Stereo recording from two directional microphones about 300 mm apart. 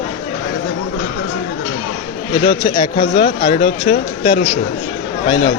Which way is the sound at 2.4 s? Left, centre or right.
Centre.